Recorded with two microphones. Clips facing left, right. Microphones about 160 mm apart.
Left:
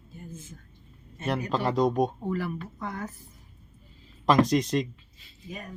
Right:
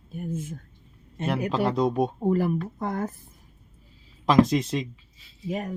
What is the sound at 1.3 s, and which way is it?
Speech, 5° right (ahead or behind).